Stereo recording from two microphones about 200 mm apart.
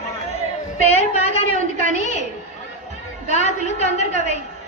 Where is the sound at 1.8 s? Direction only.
40° right (ahead or behind).